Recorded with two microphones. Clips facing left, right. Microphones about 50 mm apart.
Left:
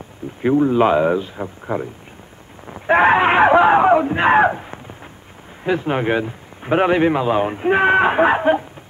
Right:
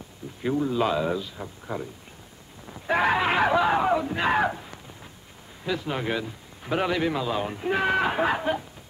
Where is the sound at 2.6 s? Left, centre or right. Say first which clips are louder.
Left 9 dB; left.